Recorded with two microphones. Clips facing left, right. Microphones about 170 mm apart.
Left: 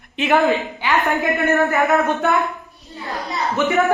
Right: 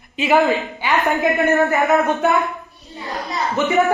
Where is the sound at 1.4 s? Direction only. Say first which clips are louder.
Right 1 dB; 20° right (ahead or behind).